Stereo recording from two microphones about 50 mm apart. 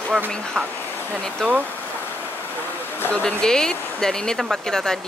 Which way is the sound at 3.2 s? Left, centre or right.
Centre.